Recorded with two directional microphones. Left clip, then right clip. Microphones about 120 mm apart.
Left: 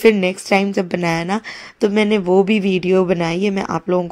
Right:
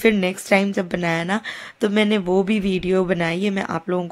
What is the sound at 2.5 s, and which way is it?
Speech, 45° right (ahead or behind).